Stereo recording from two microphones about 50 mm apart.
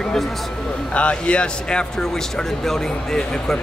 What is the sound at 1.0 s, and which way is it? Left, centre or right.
Speech, left.